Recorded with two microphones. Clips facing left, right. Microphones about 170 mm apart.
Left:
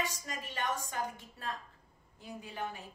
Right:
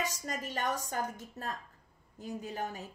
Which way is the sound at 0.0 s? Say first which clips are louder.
Right 2 dB; 40° right (ahead or behind).